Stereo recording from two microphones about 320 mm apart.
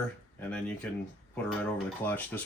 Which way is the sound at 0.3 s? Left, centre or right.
Centre.